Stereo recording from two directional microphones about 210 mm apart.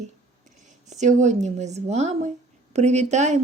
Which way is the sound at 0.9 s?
35° right (ahead or behind).